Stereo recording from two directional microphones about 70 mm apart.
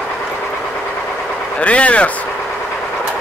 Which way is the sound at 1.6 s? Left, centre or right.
Centre.